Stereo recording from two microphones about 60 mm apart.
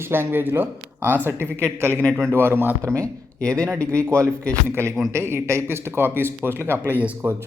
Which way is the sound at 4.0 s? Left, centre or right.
Right.